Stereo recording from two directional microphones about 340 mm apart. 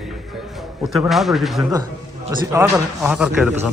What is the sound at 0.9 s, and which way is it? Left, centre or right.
Speech, centre.